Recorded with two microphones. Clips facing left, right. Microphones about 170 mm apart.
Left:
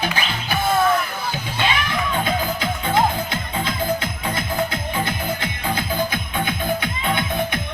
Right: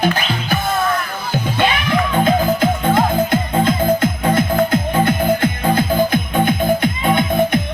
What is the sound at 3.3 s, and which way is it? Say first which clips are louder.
Music: right 10 dB; 55° right (ahead or behind).